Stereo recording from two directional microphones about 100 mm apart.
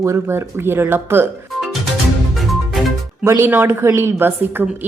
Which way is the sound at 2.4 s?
Centre (ahead or behind).